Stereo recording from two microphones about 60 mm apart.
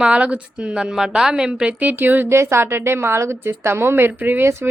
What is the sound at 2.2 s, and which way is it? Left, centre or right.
A woman's voice, right.